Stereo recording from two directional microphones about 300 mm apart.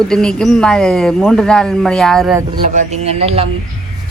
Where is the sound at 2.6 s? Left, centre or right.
Right.